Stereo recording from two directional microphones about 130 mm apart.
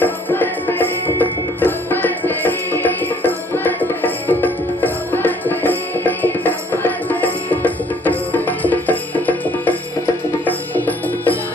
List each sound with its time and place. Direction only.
0.0 s music: 15° left (ahead or behind)